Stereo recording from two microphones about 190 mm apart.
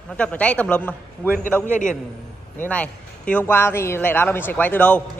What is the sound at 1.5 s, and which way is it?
Speech, 10° right (ahead or behind).